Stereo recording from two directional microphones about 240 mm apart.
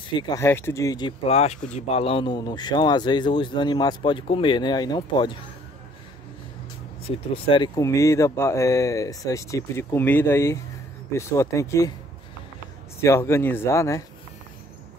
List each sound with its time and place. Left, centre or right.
0.1 s speech: centre
7.1 s speech: left
13.0 s speech: centre